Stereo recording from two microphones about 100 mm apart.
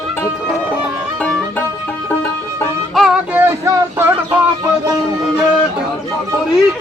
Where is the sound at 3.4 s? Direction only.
25° right (ahead or behind).